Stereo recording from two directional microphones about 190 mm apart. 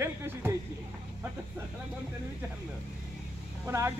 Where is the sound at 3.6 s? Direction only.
15° right (ahead or behind).